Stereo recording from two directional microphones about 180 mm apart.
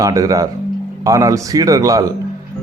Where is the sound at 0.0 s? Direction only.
20° right (ahead or behind).